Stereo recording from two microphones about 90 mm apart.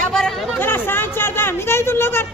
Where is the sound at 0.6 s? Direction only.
25° left (ahead or behind).